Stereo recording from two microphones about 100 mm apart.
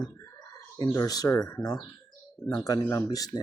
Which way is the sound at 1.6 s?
40° left (ahead or behind).